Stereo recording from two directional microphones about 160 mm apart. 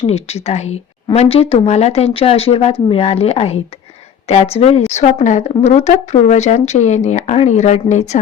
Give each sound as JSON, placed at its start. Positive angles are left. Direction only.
{"t": 0.0, "sound": "a woman's voice", "side_deg": 40}